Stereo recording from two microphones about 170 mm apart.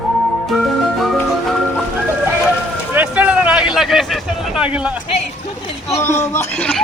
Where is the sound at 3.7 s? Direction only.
Centre (ahead or behind).